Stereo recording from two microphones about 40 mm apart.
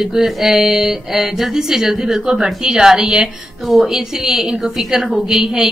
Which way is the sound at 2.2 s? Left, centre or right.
Centre.